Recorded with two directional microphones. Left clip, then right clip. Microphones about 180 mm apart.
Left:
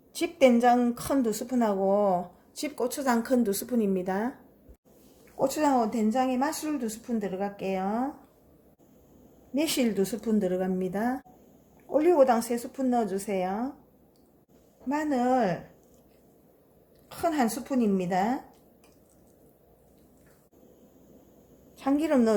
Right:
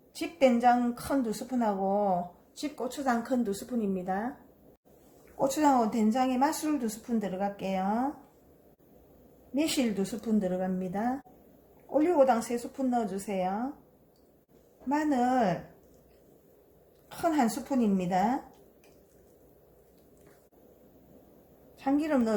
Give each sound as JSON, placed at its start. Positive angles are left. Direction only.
{"t": 0.1, "sound": "a woman's voice", "side_deg": 50}
{"t": 5.4, "sound": "a woman's voice", "side_deg": 25}
{"t": 9.6, "sound": "a woman's voice", "side_deg": 40}
{"t": 14.8, "sound": "a woman's voice", "side_deg": 25}
{"t": 17.1, "sound": "a woman's voice", "side_deg": 30}
{"t": 21.8, "sound": "a woman's voice", "side_deg": 50}